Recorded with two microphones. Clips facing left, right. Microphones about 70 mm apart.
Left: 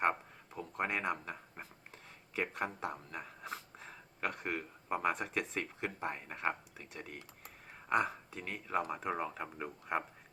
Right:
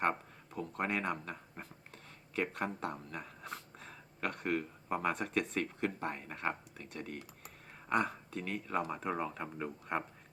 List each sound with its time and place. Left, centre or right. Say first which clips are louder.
0.0 s speech: left 1 dB; centre